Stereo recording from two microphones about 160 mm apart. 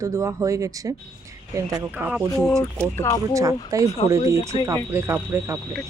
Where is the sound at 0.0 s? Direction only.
20° right (ahead or behind).